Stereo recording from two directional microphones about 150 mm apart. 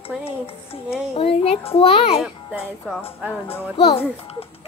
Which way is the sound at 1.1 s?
40° left (ahead or behind).